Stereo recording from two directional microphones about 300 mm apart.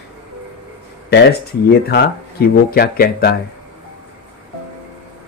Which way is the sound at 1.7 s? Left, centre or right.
Left.